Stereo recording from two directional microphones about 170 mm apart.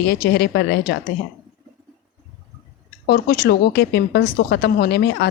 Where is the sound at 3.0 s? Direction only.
80° left.